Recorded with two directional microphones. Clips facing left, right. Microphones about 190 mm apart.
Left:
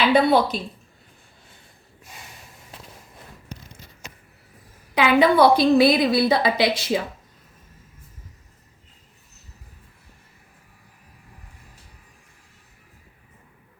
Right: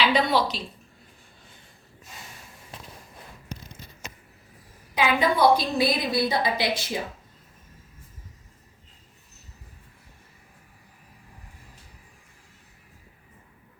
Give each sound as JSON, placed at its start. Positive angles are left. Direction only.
{"t": 0.1, "sound": "a woman's voice", "side_deg": 55}
{"t": 4.9, "sound": "a woman's voice", "side_deg": 70}